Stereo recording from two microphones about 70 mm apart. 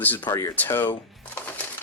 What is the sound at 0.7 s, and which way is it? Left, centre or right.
Speech, left.